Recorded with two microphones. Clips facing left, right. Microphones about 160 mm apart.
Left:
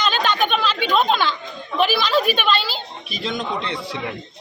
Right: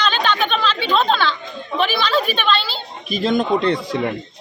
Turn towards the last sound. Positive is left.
turn(degrees=-45)  # may be behind; listen again after turning